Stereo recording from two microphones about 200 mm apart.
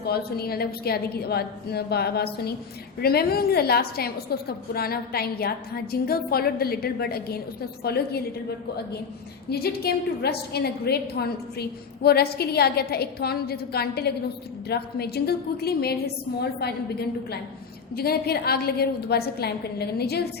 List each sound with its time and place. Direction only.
0.0 s a woman's voice: 50° left (ahead or behind)
9.5 s a woman's voice: 50° left (ahead or behind)